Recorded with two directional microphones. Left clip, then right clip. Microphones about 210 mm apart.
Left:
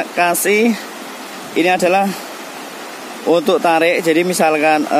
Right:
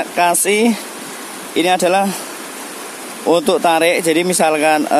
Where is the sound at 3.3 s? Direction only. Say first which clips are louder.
Even; 15° right (ahead or behind).